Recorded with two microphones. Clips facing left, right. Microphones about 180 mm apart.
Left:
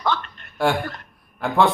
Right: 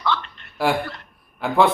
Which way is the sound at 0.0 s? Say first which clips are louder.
Left 1 dB; 45° left (ahead or behind).